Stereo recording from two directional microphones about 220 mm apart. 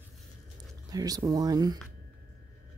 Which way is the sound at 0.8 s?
15° right (ahead or behind).